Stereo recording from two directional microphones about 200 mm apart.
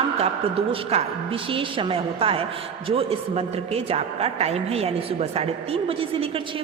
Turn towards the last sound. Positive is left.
turn(degrees=-30)  # may be behind; listen again after turning